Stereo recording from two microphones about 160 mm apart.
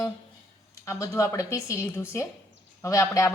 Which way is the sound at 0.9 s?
20° left (ahead or behind).